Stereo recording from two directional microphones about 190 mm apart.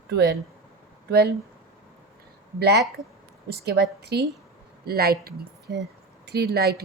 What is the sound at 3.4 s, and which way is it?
Speech, 60° right (ahead or behind).